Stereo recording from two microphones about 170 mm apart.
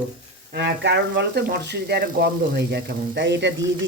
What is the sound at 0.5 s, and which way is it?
Speech, 90° right.